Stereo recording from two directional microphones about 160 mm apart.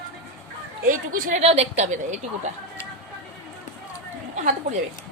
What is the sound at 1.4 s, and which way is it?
A woman's voice, 40° right (ahead or behind).